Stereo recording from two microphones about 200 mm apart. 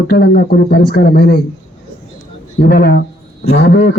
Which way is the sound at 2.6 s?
50° left (ahead or behind).